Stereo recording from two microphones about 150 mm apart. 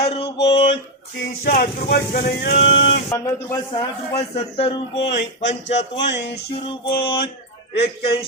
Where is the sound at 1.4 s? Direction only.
80° left.